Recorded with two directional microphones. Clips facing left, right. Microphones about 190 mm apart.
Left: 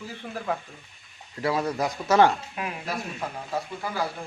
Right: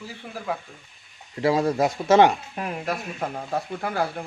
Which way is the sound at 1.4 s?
25° right (ahead or behind).